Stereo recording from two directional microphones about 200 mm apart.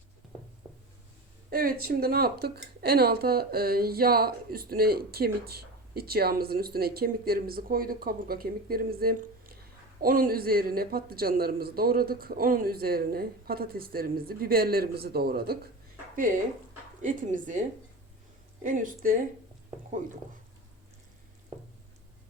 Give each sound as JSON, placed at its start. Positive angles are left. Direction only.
{"t": 1.5, "sound": "speech", "side_deg": -45}